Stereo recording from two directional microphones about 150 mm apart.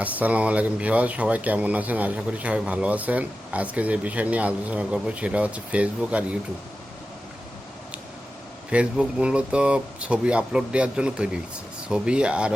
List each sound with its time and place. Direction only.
0.0 s speech: 10° right (ahead or behind)
8.7 s speech: 5° right (ahead or behind)